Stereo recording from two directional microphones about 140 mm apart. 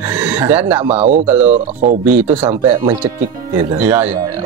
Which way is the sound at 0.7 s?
45° right (ahead or behind).